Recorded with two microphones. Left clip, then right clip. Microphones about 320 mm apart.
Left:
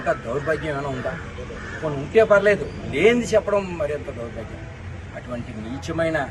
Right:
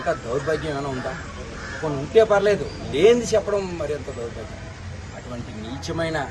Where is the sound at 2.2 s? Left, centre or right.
Centre.